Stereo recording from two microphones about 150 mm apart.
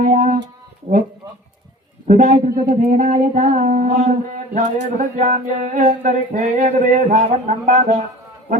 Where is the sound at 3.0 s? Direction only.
55° right (ahead or behind).